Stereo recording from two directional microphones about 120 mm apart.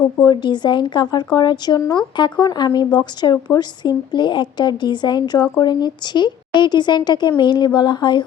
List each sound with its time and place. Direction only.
0.2 s speech: 35° left (ahead or behind)